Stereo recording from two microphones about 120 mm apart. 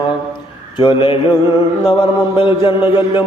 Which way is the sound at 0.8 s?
45° left (ahead or behind).